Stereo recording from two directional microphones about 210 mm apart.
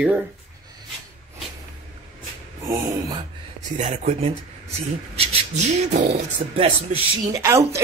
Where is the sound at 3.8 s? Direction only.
30° right (ahead or behind).